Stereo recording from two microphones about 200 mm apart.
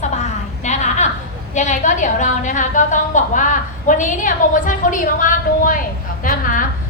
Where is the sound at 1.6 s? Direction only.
40° left (ahead or behind).